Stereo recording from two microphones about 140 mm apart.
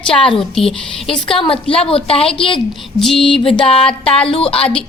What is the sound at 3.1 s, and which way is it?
A woman's voice, 40° left (ahead or behind).